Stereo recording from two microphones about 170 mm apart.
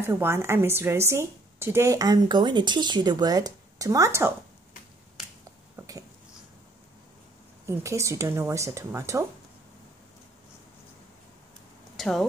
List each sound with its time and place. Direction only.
0.0 s a woman's voice: 15° right (ahead or behind)
7.6 s speech: 15° right (ahead or behind)
12.0 s speech: centre (ahead or behind)